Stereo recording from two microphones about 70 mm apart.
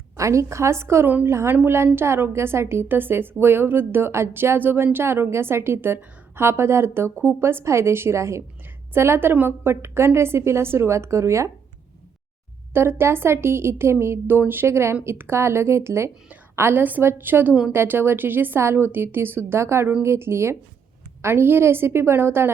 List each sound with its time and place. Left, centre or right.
0.2 s a woman's voice: right
12.7 s a woman's voice: right